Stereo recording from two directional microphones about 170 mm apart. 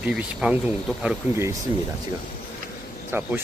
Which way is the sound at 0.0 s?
5° right (ahead or behind).